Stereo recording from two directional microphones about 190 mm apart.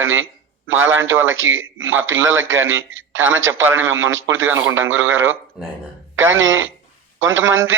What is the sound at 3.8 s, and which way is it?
A man's voice, 90° right.